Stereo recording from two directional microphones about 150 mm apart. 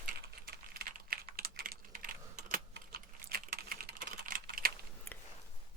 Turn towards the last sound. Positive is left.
turn(degrees=-75)  # may be behind; listen again after turning